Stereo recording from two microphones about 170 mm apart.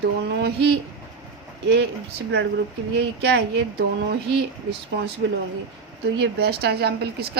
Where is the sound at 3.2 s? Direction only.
80° right.